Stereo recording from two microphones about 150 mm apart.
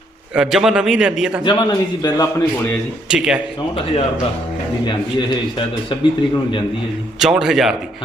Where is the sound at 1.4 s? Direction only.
30° left (ahead or behind).